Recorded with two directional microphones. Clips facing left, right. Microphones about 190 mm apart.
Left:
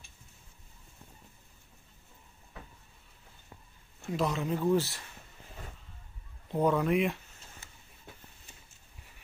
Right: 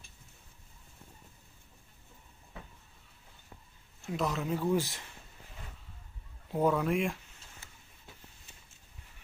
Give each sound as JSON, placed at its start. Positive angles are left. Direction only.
{"t": 4.1, "sound": "a man's voice", "side_deg": 0}
{"t": 4.7, "sound": "speech", "side_deg": -15}
{"t": 6.5, "sound": "a man's voice", "side_deg": -5}